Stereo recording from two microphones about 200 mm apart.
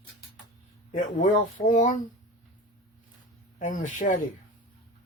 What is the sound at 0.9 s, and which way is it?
Speech, 40° left (ahead or behind).